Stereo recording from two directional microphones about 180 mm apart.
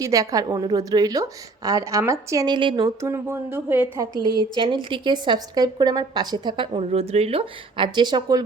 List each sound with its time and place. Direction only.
0.0 s a woman's voice: 20° right (ahead or behind)
3.1 s a woman's voice: 15° right (ahead or behind)